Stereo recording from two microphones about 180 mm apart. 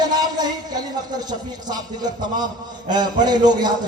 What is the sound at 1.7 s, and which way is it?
A man's voice, 25° right (ahead or behind).